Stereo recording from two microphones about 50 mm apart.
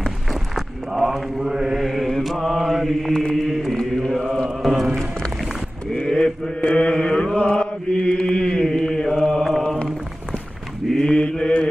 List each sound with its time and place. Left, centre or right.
0.0 s mantra: centre
4.6 s chant: centre
5.9 s chant: centre
8.6 s mantra: centre
11.0 s mantra: centre